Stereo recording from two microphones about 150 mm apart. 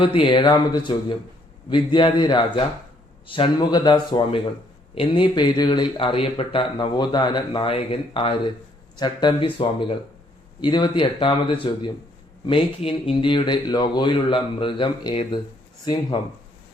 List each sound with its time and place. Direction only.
0.0 s a man's voice: 35° left (ahead or behind)